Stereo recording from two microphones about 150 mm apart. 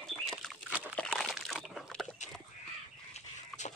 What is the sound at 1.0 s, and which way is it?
Crumpling, 5° left (ahead or behind).